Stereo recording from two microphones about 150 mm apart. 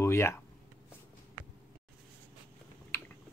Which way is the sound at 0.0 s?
20° left (ahead or behind).